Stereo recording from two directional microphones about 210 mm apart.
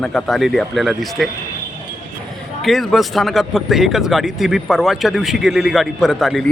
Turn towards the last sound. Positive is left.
turn(degrees=0)  # may be behind; listen again after turning